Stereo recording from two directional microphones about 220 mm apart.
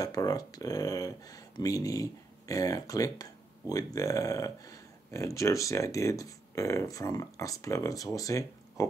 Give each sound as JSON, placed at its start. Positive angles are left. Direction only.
{"t": 0.0, "sound": "speech", "side_deg": 15}